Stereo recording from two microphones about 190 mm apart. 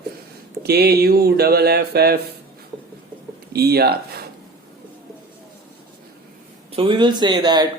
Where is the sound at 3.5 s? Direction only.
55° right (ahead or behind).